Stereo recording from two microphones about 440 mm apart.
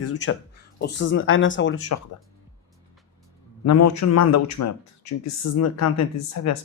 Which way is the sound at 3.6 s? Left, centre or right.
Left.